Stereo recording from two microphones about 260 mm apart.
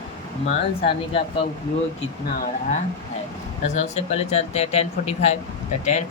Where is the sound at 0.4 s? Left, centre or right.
Left.